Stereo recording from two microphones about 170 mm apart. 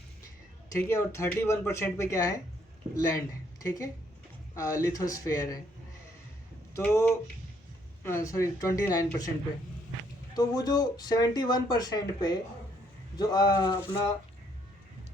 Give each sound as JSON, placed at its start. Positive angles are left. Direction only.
{"t": 0.7, "sound": "speech", "side_deg": 15}
{"t": 6.7, "sound": "speech", "side_deg": 15}
{"t": 10.3, "sound": "speech", "side_deg": 25}